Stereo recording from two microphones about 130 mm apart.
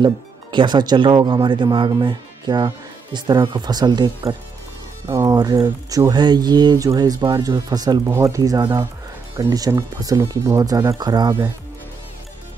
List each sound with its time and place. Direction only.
0.0 s speech: 35° right (ahead or behind)